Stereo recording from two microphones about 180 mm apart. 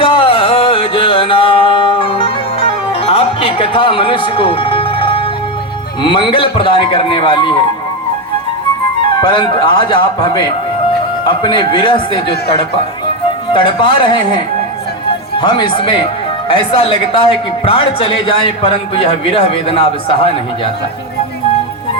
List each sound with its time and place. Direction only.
0.0 s music: 30° left (ahead or behind)
6.0 s a man's voice: 25° left (ahead or behind)
9.0 s a man's voice: 25° left (ahead or behind)